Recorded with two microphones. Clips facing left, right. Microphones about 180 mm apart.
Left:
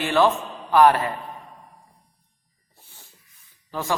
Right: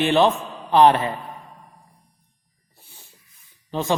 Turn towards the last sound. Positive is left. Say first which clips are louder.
# right 4 dB
turn(degrees=-20)  # may be behind; listen again after turning